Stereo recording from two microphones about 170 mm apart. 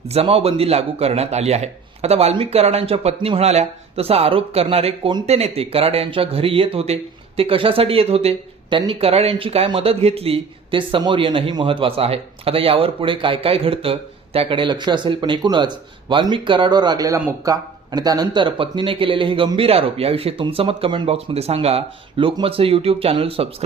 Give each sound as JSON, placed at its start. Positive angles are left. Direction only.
{"t": 0.1, "sound": "speech", "side_deg": -35}